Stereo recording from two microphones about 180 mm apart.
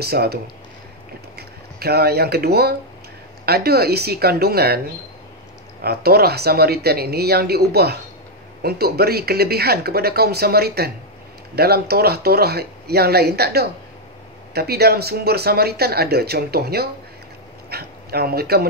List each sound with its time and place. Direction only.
0.0 s speech: 60° right (ahead or behind)
1.8 s speech: 60° right (ahead or behind)